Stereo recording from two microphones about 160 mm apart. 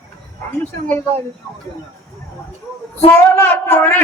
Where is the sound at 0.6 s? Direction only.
10° left (ahead or behind).